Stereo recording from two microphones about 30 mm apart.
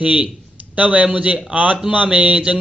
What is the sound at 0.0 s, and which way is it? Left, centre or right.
Speech, right.